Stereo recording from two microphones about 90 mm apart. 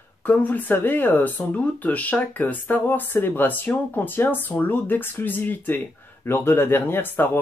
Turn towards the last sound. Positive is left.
turn(degrees=25)  # may be behind; listen again after turning